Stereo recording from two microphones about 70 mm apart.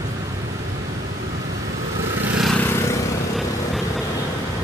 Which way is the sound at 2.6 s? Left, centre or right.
Left.